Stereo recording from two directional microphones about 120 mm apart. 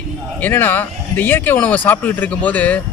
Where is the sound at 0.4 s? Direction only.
15° left (ahead or behind).